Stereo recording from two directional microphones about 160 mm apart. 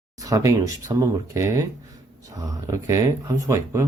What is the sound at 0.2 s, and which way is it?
Speech, 20° right (ahead or behind).